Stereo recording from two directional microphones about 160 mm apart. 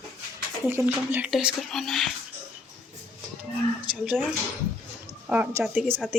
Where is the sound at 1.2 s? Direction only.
Centre (ahead or behind).